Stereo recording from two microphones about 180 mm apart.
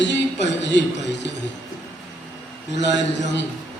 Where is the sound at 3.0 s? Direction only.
80° left.